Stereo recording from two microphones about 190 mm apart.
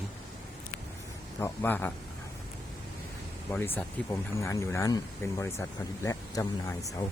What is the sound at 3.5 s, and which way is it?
Speech, 10° left (ahead or behind).